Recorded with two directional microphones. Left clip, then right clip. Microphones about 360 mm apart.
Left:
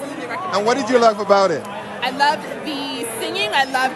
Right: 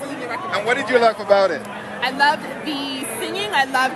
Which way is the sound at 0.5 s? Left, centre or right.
Centre.